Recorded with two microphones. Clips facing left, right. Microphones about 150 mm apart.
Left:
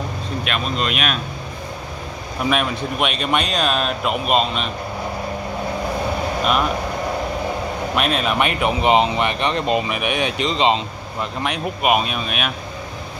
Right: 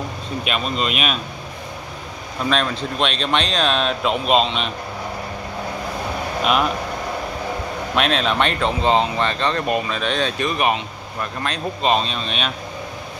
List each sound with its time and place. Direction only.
0.5 s speech: centre (ahead or behind)
2.5 s speech: 10° left (ahead or behind)
7.9 s speech: 5° left (ahead or behind)